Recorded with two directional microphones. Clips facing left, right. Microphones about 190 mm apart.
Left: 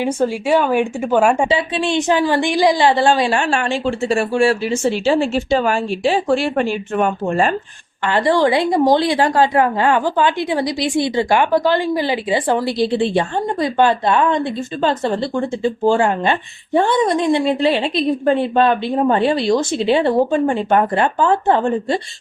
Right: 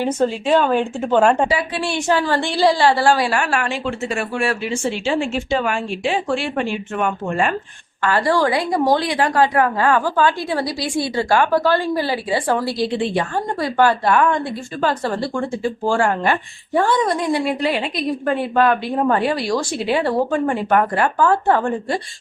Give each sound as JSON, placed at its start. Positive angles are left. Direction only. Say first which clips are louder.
{"t": 0.0, "sound": "a woman's voice", "louder": "left 1 dB", "side_deg": 10}
{"t": 1.5, "sound": "a woman's voice", "louder": "left 3 dB", "side_deg": 25}
{"t": 8.0, "sound": "a woman's voice", "louder": "left 2 dB", "side_deg": 20}